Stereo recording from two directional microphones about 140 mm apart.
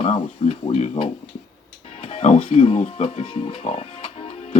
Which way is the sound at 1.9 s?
55° left (ahead or behind).